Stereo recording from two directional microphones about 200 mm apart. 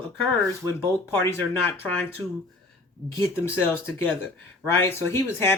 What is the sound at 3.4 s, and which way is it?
Speech, 10° left (ahead or behind).